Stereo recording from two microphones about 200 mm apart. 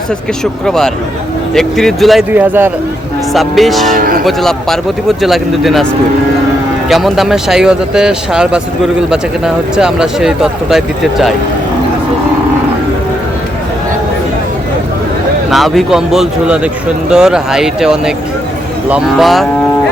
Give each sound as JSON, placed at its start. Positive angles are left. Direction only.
{"t": 0.6, "sound": "speech", "side_deg": 0}
{"t": 3.9, "sound": "speech", "side_deg": -45}
{"t": 4.3, "sound": "speech", "side_deg": 0}
{"t": 6.8, "sound": "speech", "side_deg": 0}
{"t": 15.4, "sound": "speech", "side_deg": 0}